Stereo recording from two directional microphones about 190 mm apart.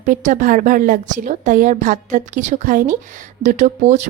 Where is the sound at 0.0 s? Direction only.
40° right (ahead or behind).